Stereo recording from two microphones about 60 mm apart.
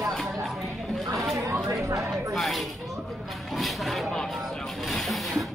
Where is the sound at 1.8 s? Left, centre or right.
Right.